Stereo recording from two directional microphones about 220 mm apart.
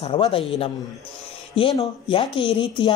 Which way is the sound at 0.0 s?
25° left (ahead or behind).